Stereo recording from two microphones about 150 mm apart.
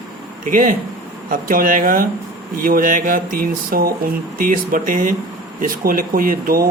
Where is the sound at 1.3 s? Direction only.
65° right (ahead or behind).